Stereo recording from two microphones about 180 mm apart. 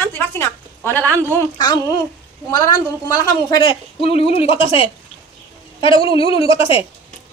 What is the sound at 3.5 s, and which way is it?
A woman's voice, 25° left (ahead or behind).